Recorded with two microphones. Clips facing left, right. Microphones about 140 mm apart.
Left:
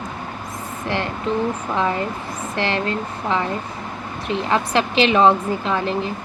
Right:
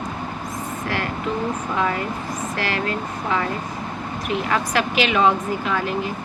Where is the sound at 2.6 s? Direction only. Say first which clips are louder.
Left 4 dB; 25° left (ahead or behind).